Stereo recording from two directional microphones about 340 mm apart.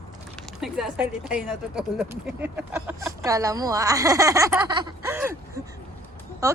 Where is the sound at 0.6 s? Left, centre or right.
Centre.